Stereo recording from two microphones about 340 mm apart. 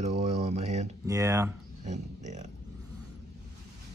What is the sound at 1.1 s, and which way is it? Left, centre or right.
Speech, centre.